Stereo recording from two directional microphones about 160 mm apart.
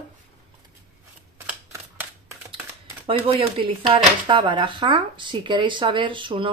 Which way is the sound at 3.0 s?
35° right (ahead or behind).